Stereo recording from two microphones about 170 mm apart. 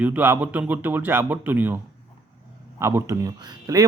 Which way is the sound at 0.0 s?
10° right (ahead or behind).